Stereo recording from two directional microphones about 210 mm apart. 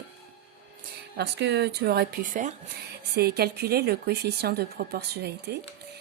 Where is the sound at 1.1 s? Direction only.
55° right (ahead or behind).